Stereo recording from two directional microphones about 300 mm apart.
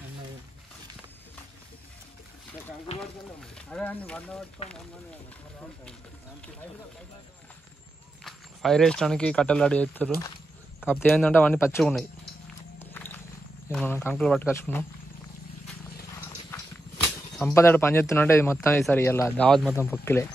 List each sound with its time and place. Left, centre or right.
3.5 s speech: centre
4.6 s speech: centre
8.2 s speech: centre
12.9 s a sound: centre
13.7 s speech: centre
17.4 s speech: centre